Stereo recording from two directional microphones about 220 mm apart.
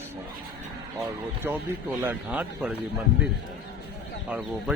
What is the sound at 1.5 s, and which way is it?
Speech, 10° right (ahead or behind).